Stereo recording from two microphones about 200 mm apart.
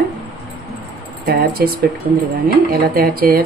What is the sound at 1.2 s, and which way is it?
Speech, 50° right (ahead or behind).